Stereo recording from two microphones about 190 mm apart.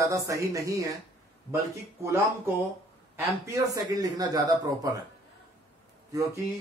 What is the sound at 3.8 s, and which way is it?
A man's voice, 20° right (ahead or behind).